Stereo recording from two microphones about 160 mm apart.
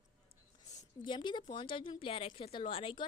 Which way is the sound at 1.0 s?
30° left (ahead or behind).